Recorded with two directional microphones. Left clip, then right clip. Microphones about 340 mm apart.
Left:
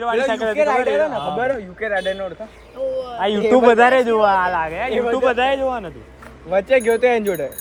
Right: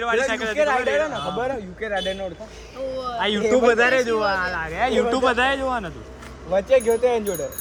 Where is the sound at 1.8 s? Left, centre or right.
Centre.